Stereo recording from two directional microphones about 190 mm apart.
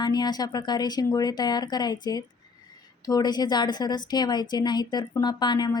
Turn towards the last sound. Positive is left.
turn(degrees=20)  # may be behind; listen again after turning